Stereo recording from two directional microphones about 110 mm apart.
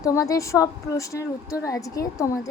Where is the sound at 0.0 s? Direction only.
30° left (ahead or behind).